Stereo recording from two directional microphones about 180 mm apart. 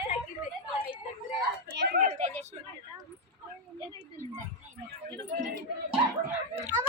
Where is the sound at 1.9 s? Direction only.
50° right (ahead or behind).